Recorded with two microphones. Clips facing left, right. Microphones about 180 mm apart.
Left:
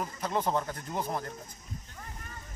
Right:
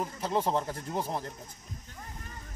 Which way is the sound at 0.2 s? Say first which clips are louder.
Right 1 dB; 30° right (ahead or behind).